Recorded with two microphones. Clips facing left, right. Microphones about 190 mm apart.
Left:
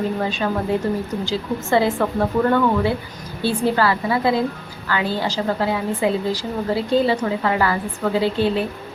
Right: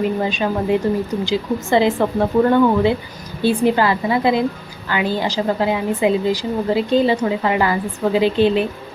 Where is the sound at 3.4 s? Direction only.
15° right (ahead or behind).